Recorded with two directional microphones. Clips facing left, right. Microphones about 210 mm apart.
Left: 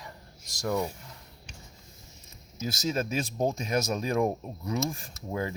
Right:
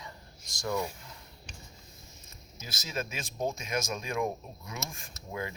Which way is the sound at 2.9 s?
40° left (ahead or behind).